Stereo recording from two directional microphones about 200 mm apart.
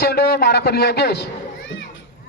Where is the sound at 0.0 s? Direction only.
50° left (ahead or behind).